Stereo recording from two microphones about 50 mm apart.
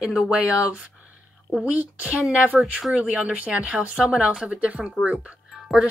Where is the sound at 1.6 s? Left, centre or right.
Right.